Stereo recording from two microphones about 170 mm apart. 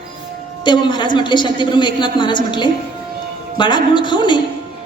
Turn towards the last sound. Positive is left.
turn(degrees=25)  # may be behind; listen again after turning